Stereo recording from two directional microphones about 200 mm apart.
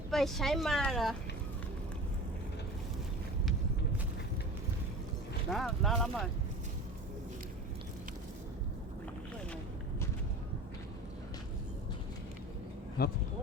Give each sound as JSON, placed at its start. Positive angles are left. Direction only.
{"t": 0.1, "sound": "speech", "side_deg": 0}
{"t": 5.5, "sound": "speech", "side_deg": 0}
{"t": 13.0, "sound": "speech", "side_deg": 50}